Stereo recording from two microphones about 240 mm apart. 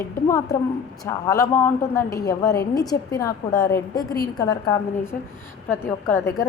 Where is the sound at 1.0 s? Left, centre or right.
Centre.